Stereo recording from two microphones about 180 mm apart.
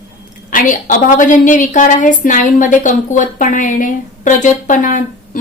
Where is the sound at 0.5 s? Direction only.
50° left (ahead or behind).